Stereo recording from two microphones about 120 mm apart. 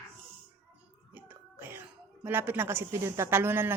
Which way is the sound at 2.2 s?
15° right (ahead or behind).